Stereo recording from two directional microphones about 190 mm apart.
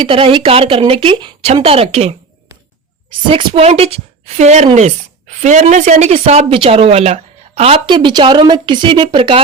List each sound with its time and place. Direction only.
0.0 s a woman's voice: 30° right (ahead or behind)